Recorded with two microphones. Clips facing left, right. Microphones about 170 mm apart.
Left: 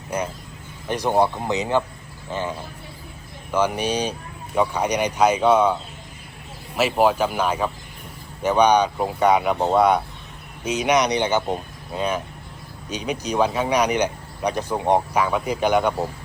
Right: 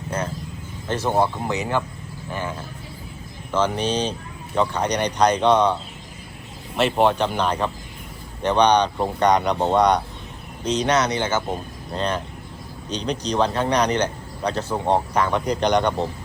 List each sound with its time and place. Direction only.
0.1 s speech: 10° left (ahead or behind)